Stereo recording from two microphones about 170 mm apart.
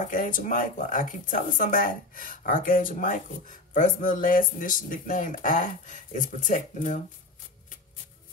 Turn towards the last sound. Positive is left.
turn(degrees=45)  # may be behind; listen again after turning